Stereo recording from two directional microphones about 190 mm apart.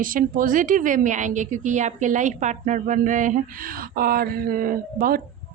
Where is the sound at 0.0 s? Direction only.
45° right (ahead or behind).